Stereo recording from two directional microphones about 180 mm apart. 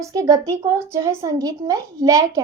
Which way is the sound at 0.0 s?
20° right (ahead or behind).